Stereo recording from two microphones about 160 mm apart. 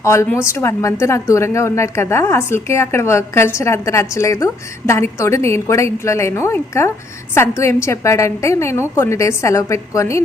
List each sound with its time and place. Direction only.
0.0 s a woman's voice: 20° left (ahead or behind)